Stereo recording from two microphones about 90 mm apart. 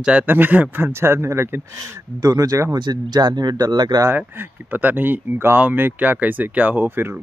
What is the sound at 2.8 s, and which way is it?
Speech, 50° right (ahead or behind).